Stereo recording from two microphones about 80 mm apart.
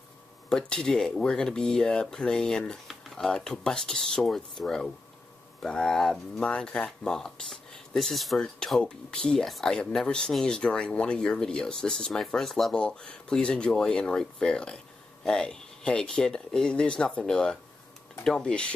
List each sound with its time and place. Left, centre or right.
0.5 s speech: centre